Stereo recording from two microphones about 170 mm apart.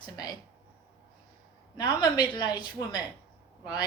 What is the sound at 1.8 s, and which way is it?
A woman's voice, 25° left (ahead or behind).